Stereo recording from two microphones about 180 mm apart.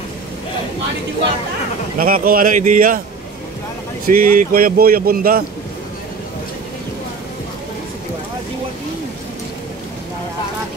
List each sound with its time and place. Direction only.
2.0 s speech: 50° right (ahead or behind)
4.1 s speech: 50° right (ahead or behind)